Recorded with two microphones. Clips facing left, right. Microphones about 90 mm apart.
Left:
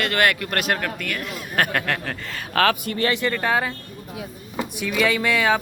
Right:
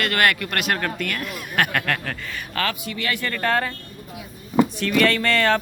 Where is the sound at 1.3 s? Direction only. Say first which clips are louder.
Left 1 dB; 25° left (ahead or behind).